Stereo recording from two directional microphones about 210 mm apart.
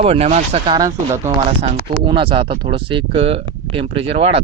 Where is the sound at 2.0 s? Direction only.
25° right (ahead or behind).